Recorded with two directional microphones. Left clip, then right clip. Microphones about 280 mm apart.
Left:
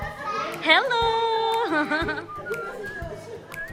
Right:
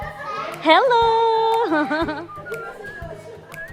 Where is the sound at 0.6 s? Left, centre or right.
Centre.